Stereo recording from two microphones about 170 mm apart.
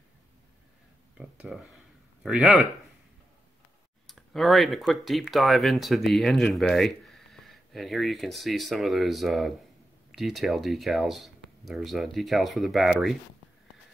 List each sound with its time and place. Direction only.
1.1 s speech: 5° right (ahead or behind)
4.1 s speech: centre (ahead or behind)